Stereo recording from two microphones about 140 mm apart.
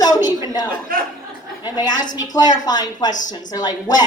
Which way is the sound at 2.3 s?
30° left (ahead or behind).